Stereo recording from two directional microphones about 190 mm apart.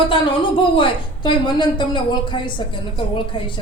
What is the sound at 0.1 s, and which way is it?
A woman's voice, 25° left (ahead or behind).